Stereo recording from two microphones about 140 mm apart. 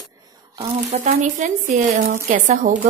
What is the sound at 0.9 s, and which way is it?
A woman's voice, 60° right (ahead or behind).